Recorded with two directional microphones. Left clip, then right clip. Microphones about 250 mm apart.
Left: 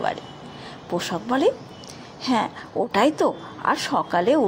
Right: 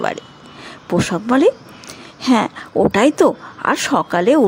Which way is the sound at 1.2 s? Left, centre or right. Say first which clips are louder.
Right 7 dB; right.